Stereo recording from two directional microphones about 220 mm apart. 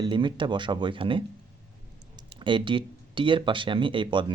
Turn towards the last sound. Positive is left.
turn(degrees=-20)  # may be behind; listen again after turning